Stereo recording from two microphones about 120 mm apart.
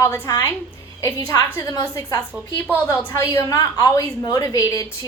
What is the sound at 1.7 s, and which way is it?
Speech, 35° left (ahead or behind).